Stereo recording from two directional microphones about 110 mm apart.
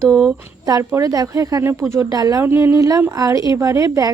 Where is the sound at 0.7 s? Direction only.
25° right (ahead or behind).